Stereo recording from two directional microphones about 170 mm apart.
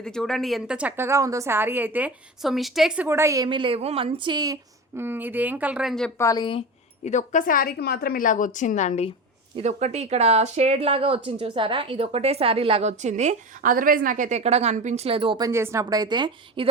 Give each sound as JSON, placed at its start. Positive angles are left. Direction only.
{"t": 0.0, "sound": "a woman's voice", "side_deg": 5}
{"t": 4.9, "sound": "a woman's voice", "side_deg": -10}
{"t": 6.1, "sound": "speech", "side_deg": 20}
{"t": 7.0, "sound": "a woman's voice", "side_deg": 45}
{"t": 9.6, "sound": "speech", "side_deg": -40}